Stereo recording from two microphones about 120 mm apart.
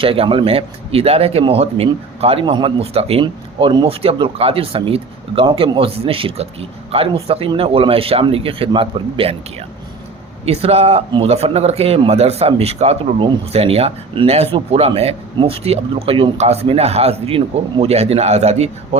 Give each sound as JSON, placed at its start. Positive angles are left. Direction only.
{"t": 0.0, "sound": "a man's voice", "side_deg": -50}